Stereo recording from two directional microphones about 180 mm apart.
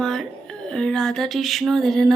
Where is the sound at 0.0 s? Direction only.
Centre (ahead or behind).